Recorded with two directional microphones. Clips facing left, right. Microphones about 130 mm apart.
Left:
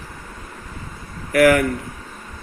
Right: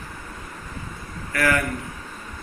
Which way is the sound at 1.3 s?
90° left.